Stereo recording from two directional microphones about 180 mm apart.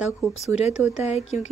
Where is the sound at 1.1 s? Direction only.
40° left (ahead or behind).